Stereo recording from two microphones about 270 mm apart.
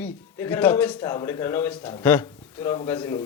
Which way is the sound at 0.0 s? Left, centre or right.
Centre.